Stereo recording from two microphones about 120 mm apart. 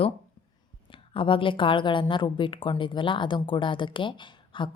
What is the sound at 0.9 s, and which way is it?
A woman's voice, 45° left (ahead or behind).